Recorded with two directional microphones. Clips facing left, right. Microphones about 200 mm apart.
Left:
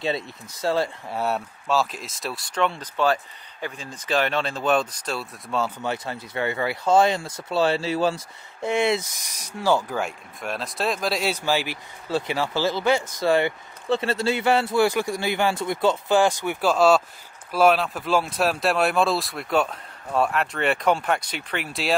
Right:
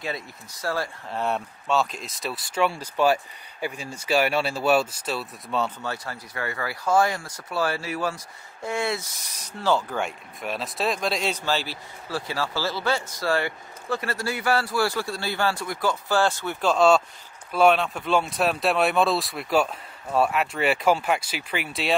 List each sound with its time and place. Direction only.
0.0 s speech: 25° left (ahead or behind)
1.0 s speech: 5° left (ahead or behind)
5.8 s speech: 20° left (ahead or behind)
16.7 s speech: 5° left (ahead or behind)